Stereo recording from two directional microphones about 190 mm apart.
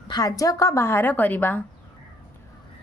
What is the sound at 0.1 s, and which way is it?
A woman's voice, 20° left (ahead or behind).